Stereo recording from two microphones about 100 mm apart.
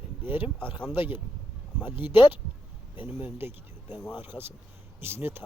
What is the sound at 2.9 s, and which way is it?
Speech, 60° left (ahead or behind).